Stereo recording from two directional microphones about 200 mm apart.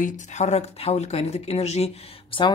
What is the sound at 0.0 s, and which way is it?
Speech, 35° left (ahead or behind).